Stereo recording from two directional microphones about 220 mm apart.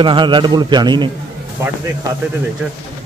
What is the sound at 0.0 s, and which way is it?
A man's voice, 20° right (ahead or behind).